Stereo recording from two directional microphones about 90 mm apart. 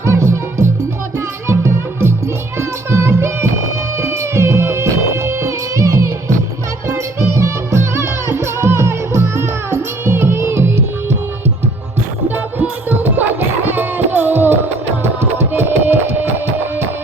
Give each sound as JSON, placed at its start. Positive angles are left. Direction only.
{"t": 0.0, "sound": "music", "side_deg": -30}
{"t": 12.3, "sound": "music", "side_deg": -20}